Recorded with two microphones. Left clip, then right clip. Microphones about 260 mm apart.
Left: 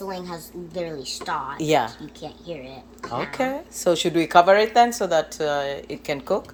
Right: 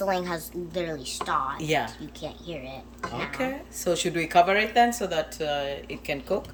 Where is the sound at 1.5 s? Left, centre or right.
Centre.